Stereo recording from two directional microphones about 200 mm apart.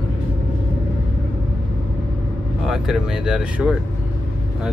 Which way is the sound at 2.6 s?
Centre (ahead or behind).